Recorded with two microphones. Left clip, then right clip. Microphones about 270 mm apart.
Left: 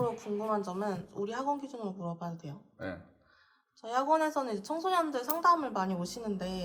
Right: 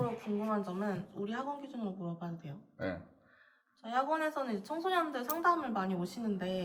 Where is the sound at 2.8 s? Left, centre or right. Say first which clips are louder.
Right 2 dB; centre.